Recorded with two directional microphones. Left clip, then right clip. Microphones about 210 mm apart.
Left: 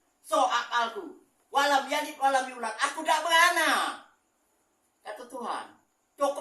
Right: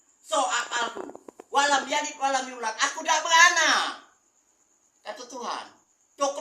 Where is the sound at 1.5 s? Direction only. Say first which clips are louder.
Right 2 dB; 15° right (ahead or behind).